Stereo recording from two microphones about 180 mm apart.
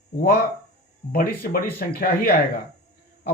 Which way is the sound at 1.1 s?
55° left (ahead or behind).